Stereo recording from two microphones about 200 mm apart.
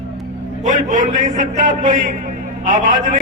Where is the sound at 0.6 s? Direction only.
40° right (ahead or behind).